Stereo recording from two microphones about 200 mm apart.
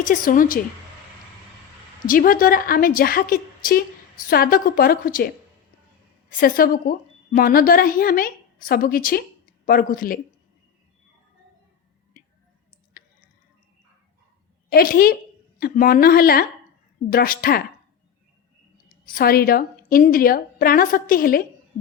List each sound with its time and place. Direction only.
0.0 s a woman's voice: 45° left (ahead or behind)
2.0 s a woman's voice: 45° left (ahead or behind)
6.4 s a woman's voice: 45° left (ahead or behind)
14.7 s a woman's voice: 50° left (ahead or behind)
18.9 s a woman's voice: 45° left (ahead or behind)